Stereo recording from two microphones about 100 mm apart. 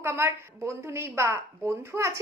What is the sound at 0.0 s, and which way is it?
A woman's voice, 25° right (ahead or behind).